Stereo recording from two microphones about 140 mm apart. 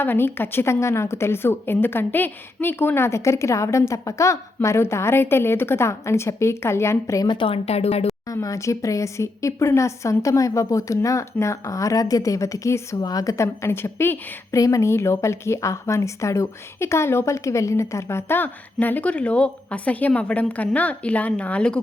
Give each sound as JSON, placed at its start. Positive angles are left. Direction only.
{"t": 0.0, "sound": "speech", "side_deg": 15}
{"t": 7.3, "sound": "speech", "side_deg": 40}
{"t": 8.3, "sound": "speech", "side_deg": 20}